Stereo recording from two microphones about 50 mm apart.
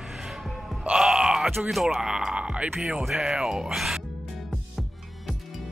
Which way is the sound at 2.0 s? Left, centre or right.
Centre.